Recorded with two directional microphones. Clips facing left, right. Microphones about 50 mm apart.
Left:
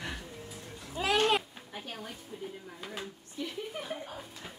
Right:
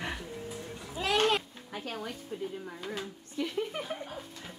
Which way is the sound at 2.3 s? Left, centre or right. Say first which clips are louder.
Right 5 dB; right.